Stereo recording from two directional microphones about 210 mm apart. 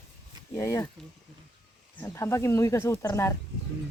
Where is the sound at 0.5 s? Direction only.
15° left (ahead or behind).